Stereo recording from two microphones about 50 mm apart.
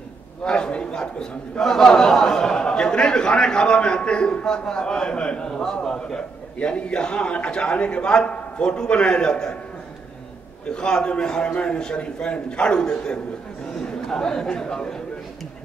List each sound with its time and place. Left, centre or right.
0.4 s a man's voice: centre
5.5 s a man's voice: centre
10.7 s a man's voice: centre